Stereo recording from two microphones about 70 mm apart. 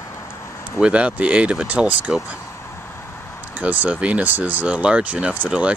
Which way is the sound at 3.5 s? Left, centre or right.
Right.